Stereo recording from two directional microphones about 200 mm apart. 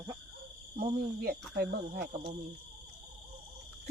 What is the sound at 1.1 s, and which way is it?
Speech, 50° right (ahead or behind).